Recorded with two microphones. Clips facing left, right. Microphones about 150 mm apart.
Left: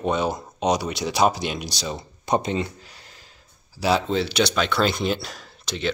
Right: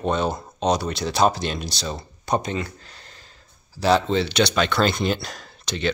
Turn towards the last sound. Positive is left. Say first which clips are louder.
# right 2 dB
turn(degrees=0)  # may be behind; listen again after turning